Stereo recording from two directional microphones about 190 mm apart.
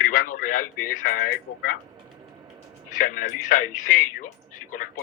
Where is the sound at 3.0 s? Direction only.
45° left (ahead or behind).